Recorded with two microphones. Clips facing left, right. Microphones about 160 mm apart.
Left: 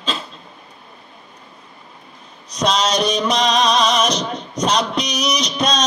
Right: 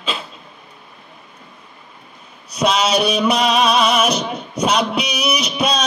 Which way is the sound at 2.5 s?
10° right (ahead or behind).